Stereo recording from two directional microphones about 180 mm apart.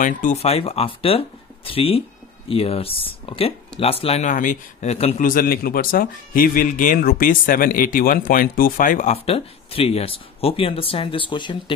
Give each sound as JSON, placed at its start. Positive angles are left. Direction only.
{"t": 0.0, "sound": "speech", "side_deg": 45}
{"t": 4.9, "sound": "speech", "side_deg": 35}
{"t": 5.2, "sound": "speech", "side_deg": 50}